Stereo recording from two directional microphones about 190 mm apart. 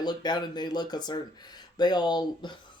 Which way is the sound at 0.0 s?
20° left (ahead or behind).